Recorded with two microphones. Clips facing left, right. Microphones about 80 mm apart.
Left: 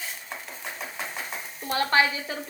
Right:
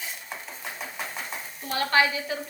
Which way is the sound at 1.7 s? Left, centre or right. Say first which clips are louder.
Even; left.